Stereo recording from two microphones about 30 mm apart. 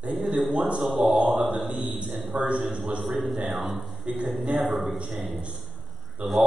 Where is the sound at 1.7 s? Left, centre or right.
Right.